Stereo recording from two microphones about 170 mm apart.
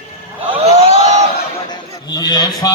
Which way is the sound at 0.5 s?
35° right (ahead or behind).